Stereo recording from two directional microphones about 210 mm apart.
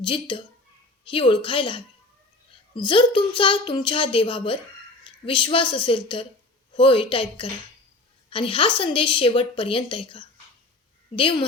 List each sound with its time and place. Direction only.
0.0 s a woman's voice: 25° left (ahead or behind)
2.8 s a woman's voice: 20° left (ahead or behind)